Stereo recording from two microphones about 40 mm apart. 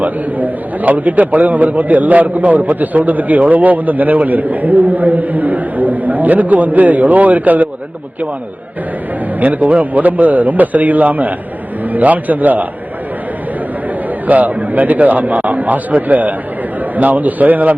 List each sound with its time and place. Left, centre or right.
0.0 s a man's voice: right
9.4 s a man's voice: right
14.3 s a man's voice: right